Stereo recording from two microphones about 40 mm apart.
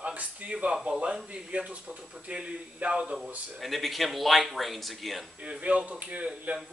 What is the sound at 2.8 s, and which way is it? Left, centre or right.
Speech, right.